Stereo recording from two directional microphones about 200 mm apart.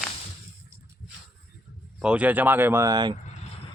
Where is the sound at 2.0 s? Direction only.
5° right (ahead or behind).